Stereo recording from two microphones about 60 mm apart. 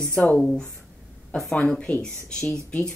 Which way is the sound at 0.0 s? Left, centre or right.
Centre.